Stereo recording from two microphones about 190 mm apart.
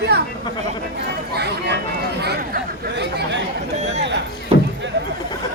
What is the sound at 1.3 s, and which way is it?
Speech, 60° right (ahead or behind).